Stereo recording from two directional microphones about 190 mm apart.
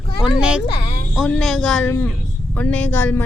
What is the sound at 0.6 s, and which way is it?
Speech, 60° left (ahead or behind).